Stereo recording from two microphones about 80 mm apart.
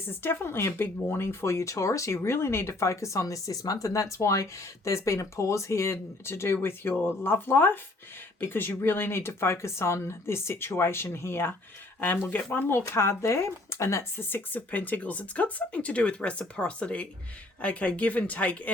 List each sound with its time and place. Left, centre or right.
0.1 s speech: left